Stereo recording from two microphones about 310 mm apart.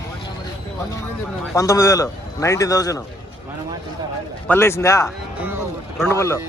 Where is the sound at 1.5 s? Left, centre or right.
Centre.